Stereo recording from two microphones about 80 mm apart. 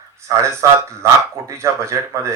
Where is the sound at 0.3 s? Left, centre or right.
Right.